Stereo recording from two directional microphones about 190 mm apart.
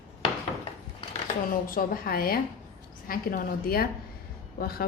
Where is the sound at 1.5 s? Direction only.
50° left (ahead or behind).